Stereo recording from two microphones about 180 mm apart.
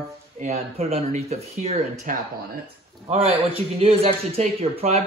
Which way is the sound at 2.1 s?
50° right (ahead or behind).